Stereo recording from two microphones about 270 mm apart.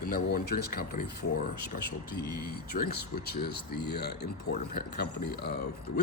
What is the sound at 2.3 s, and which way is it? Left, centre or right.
Speech, left.